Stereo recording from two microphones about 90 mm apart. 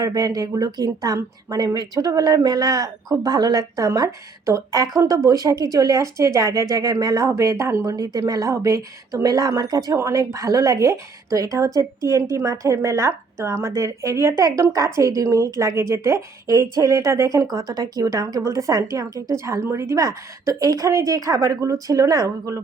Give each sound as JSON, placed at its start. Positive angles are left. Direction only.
{"t": 0.0, "sound": "speech", "side_deg": -40}